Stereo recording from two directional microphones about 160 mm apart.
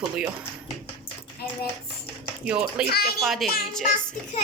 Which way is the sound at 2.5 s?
5° right (ahead or behind).